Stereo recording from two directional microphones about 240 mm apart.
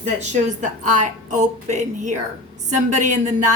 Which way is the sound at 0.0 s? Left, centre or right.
Right.